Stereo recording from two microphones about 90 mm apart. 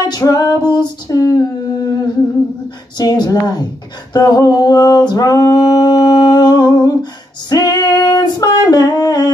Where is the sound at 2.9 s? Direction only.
50° left (ahead or behind).